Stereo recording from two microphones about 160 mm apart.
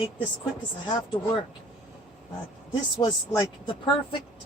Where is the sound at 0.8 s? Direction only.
30° left (ahead or behind).